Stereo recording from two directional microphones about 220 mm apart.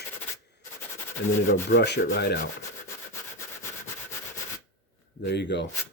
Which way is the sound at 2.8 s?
15° left (ahead or behind).